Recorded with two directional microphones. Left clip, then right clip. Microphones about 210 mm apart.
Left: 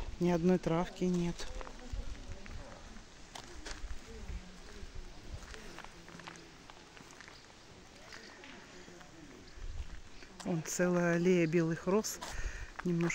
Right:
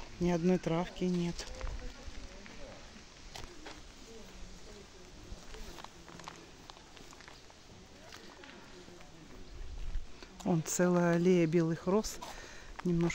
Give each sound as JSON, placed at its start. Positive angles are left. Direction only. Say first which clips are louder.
{"t": 0.2, "sound": "speech", "louder": "even", "side_deg": 0}
{"t": 10.4, "sound": "speech", "louder": "right 2 dB", "side_deg": -20}
{"t": 11.5, "sound": "speech", "louder": "right 1 dB", "side_deg": -5}